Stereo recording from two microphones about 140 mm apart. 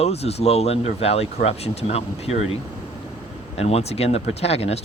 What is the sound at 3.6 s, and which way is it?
Speech, 50° left (ahead or behind).